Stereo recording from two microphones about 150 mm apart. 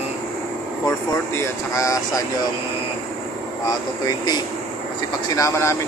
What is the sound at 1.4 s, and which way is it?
Speech, 20° left (ahead or behind).